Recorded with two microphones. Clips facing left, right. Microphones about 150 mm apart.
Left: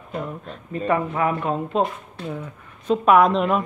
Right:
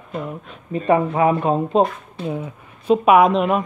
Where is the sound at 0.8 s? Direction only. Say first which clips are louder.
Right 5 dB; 25° right (ahead or behind).